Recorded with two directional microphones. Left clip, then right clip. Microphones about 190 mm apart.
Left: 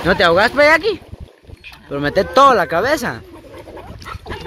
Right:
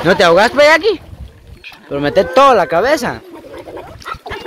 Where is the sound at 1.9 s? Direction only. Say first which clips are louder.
Right 4 dB; 10° left (ahead or behind).